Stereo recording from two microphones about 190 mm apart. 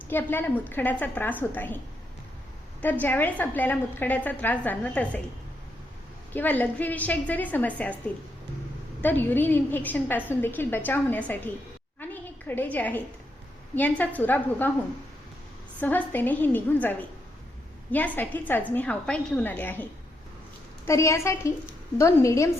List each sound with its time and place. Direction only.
0.1 s a woman's voice: 10° left (ahead or behind)
3.0 s a woman's voice: 10° left (ahead or behind)
6.3 s a woman's voice: 10° left (ahead or behind)
9.0 s a woman's voice: 10° left (ahead or behind)
11.9 s a sound: 10° left (ahead or behind)
13.7 s a woman's voice: 10° left (ahead or behind)
15.8 s a woman's voice: 10° left (ahead or behind)